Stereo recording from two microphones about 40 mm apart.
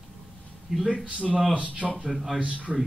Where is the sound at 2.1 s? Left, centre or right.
Centre.